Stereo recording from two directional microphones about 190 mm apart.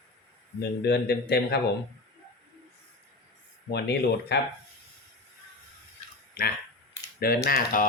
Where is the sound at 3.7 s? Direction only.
60° left (ahead or behind).